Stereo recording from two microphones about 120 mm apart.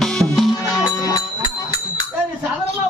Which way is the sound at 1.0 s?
30° left (ahead or behind).